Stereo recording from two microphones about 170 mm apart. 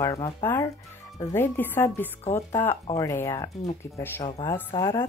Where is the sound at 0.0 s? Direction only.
15° left (ahead or behind).